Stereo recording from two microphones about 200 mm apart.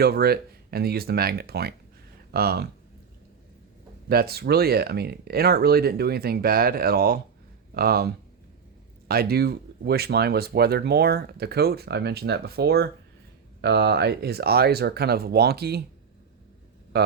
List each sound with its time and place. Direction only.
0.0 s speech: 50° right (ahead or behind)
4.1 s speech: 50° right (ahead or behind)
16.9 s speech: 55° right (ahead or behind)